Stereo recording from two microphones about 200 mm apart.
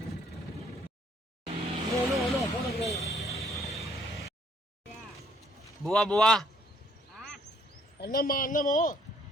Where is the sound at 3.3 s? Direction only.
15° left (ahead or behind).